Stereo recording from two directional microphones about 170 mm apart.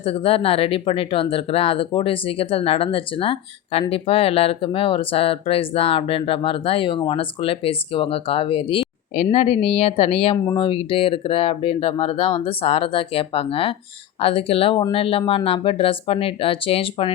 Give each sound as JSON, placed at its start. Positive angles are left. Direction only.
{"t": 0.0, "sound": "speech", "side_deg": 35}
{"t": 10.3, "sound": "speech", "side_deg": 20}
{"t": 10.6, "sound": "speech", "side_deg": 30}